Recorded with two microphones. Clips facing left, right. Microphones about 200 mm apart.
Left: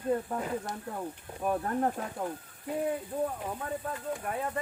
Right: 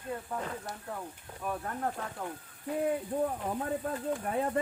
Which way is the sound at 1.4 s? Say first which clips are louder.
Left 6 dB; 40° left (ahead or behind).